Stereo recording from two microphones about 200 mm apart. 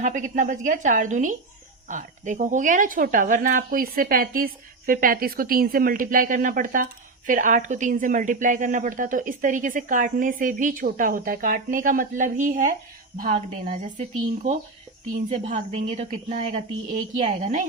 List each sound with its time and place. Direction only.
0.0 s a woman's voice: 40° right (ahead or behind)